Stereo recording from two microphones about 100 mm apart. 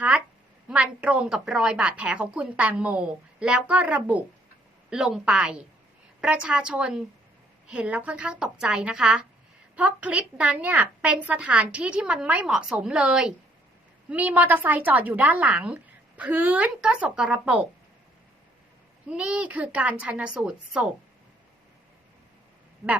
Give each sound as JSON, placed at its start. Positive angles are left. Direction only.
{"t": 0.7, "sound": "a woman's voice", "side_deg": -10}
{"t": 4.9, "sound": "a woman's voice", "side_deg": -5}
{"t": 19.0, "sound": "a woman's voice", "side_deg": -10}